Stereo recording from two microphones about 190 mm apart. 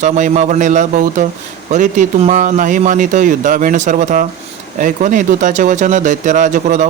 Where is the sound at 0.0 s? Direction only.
40° right (ahead or behind).